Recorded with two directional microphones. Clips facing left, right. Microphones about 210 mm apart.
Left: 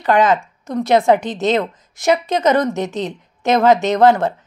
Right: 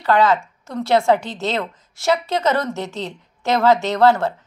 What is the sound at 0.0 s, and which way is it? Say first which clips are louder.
A woman's voice: left 2 dB; 20° left (ahead or behind).